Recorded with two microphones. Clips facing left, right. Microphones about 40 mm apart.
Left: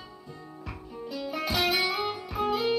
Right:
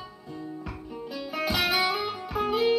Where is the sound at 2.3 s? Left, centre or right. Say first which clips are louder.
Right 3 dB; centre.